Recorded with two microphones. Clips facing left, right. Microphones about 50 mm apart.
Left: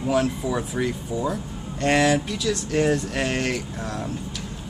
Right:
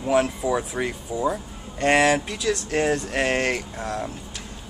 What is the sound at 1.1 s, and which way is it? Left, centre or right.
Speech, centre.